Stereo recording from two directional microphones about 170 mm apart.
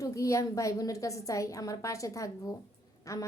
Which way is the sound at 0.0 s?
20° left (ahead or behind).